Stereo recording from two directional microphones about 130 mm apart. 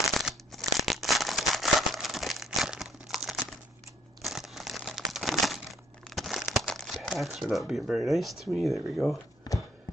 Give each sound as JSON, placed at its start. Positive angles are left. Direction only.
{"t": 0.2, "sound": "a sound", "side_deg": 0}
{"t": 4.2, "sound": "crumpling", "side_deg": 0}
{"t": 9.0, "sound": "speech", "side_deg": 20}
{"t": 9.5, "sound": "clip-clop", "side_deg": 30}